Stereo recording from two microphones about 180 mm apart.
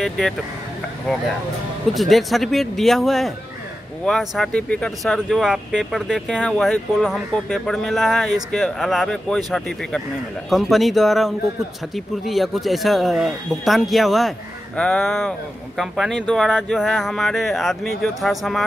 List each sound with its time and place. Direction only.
2.0 s speech: centre (ahead or behind)